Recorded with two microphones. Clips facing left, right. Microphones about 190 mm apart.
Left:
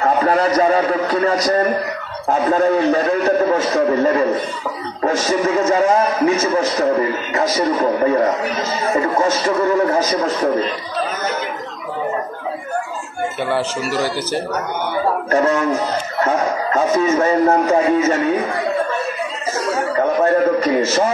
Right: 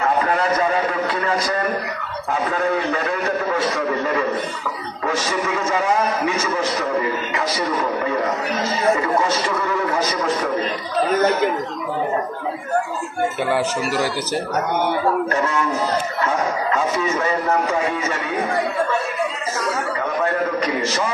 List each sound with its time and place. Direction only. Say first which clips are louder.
0.0 s a man's voice: left 4 dB; 35° left (ahead or behind)
9.2 s a man's voice: left 5 dB; 45° left (ahead or behind)
13.5 s speech: even; 10° right (ahead or behind)
15.3 s a man's voice: left 5 dB; 40° left (ahead or behind)
20.0 s a sound: left 9 dB; 40° left (ahead or behind)